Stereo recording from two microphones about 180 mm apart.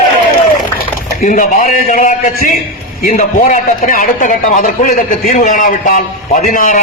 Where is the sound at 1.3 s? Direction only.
45° left (ahead or behind).